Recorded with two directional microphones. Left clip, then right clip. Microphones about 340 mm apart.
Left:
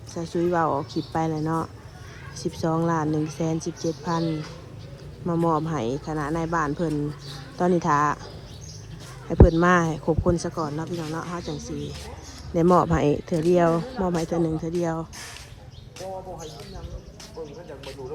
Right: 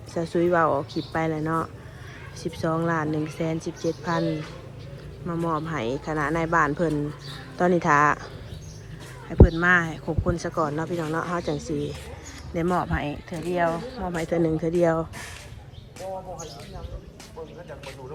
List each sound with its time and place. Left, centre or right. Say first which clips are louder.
0.1 s a woman's voice: right 2 dB; centre
5.2 s a woman's voice: left 4 dB; centre
9.6 s a woman's voice: even; centre
12.5 s a woman's voice: left 6 dB; left